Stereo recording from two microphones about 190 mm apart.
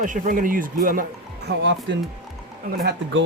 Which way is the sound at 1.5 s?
65° right (ahead or behind).